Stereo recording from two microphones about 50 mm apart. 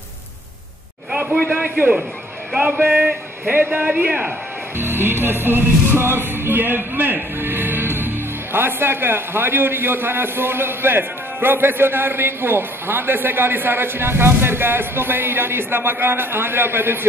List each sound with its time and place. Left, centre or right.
1.5 s a sound: right
3.4 s a man's voice: right
3.8 s a man's voice: right
4.7 s music: right
5.4 s a man's voice: right